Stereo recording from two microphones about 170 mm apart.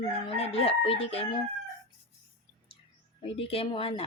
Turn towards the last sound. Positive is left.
turn(degrees=35)  # may be behind; listen again after turning